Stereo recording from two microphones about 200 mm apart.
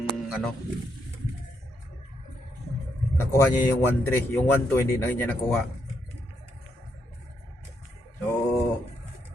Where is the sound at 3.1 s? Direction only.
15° left (ahead or behind).